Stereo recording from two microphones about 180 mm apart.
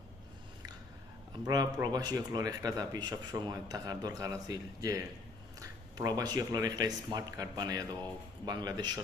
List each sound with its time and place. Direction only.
1.5 s speech: 20° right (ahead or behind)